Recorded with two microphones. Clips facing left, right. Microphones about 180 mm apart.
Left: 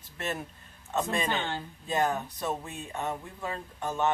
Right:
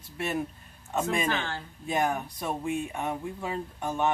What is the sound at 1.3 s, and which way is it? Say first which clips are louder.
Speech: right 1 dB; 20° left (ahead or behind).